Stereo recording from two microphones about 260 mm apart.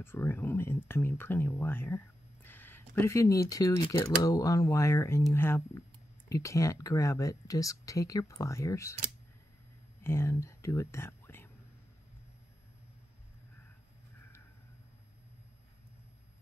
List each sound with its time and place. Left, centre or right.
0.0 s speech: centre
10.0 s speech: centre